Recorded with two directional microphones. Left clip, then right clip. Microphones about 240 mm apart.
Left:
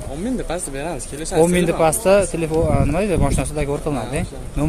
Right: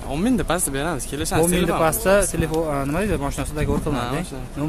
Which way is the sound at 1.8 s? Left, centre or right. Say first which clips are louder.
Left 3 dB; centre.